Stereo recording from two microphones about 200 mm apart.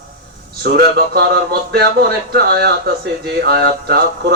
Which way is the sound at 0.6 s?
50° right (ahead or behind).